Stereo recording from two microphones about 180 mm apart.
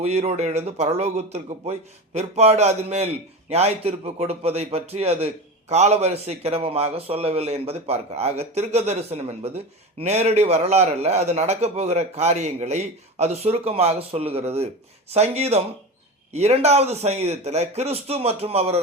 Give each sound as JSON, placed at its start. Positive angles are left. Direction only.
{"t": 0.0, "sound": "a man's voice", "side_deg": -35}